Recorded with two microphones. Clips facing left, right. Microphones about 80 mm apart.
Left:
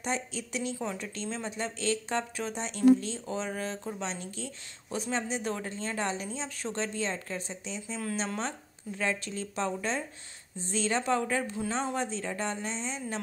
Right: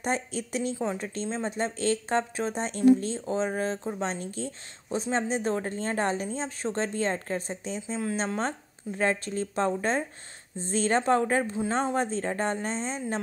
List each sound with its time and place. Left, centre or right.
0.0 s a woman's voice: right
11.7 s a woman's voice: right